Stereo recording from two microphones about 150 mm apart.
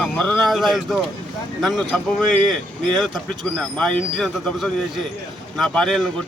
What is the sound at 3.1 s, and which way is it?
A man's voice, 5° left (ahead or behind).